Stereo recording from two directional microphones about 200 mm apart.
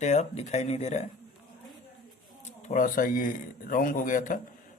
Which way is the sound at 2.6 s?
40° left (ahead or behind).